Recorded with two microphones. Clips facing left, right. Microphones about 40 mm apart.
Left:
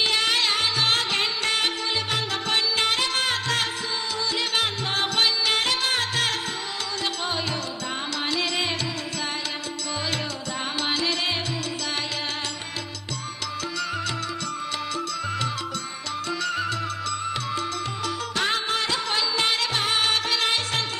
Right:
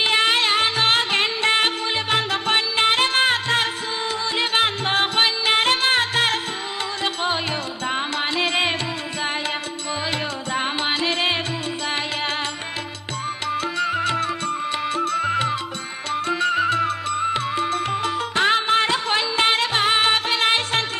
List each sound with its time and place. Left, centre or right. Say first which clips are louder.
0.0 s music: right 4 dB; right
10.5 s music: right 5 dB; right
13.5 s music: right 7 dB; right